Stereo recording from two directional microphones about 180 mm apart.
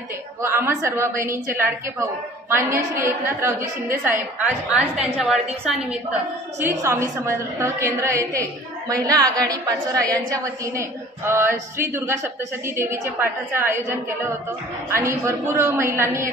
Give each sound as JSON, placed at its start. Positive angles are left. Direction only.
{"t": 0.4, "sound": "a woman's voice", "side_deg": -15}
{"t": 14.9, "sound": "a woman's voice", "side_deg": -15}